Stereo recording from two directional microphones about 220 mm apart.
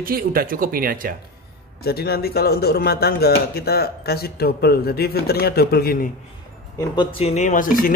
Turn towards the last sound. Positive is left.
turn(degrees=40)  # may be behind; listen again after turning